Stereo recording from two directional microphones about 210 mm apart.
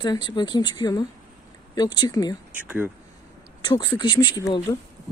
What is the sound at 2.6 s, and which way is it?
Speech, 10° right (ahead or behind).